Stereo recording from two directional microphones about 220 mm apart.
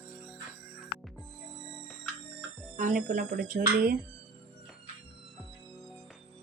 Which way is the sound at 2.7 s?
35° right (ahead or behind).